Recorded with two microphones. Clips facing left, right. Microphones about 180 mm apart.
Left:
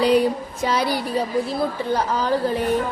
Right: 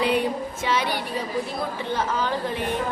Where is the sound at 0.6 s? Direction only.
40° left (ahead or behind).